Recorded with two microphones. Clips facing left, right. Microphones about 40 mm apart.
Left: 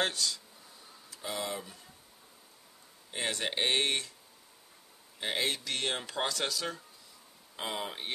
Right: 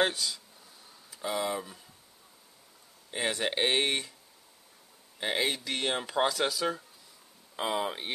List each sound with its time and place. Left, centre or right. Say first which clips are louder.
0.0 s speech: right 3 dB; centre
3.1 s speech: right 3 dB; centre
5.2 s speech: right 3 dB; centre